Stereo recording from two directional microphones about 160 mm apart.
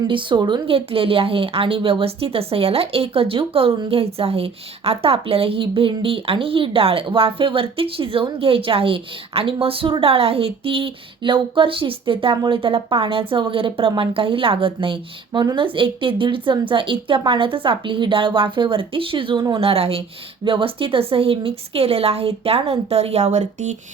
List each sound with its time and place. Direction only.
0.1 s a woman's voice: 30° right (ahead or behind); by 23.7 s 50° right (ahead or behind)